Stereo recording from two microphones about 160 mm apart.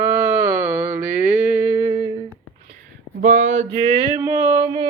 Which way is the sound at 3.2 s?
50° right (ahead or behind).